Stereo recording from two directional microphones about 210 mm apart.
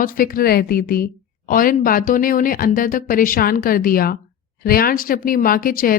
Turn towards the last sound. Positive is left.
turn(degrees=45)  # may be behind; listen again after turning